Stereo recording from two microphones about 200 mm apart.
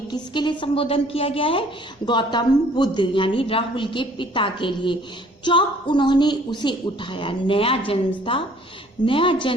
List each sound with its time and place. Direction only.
0.1 s a woman's voice: 25° left (ahead or behind)